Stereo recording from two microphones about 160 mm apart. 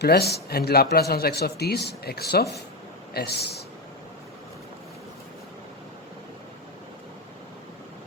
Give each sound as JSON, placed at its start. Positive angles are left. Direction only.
{"t": 0.0, "sound": "a man's voice", "side_deg": 85}